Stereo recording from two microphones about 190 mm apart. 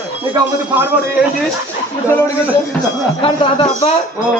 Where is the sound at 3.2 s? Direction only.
25° left (ahead or behind).